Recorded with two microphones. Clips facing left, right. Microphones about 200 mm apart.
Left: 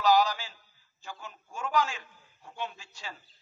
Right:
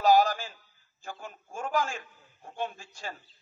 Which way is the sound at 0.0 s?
50° right (ahead or behind).